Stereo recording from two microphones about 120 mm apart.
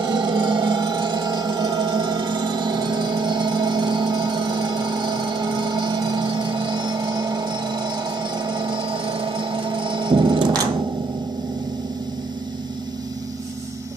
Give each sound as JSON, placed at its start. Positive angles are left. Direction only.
{"t": 0.0, "sound": "music", "side_deg": -40}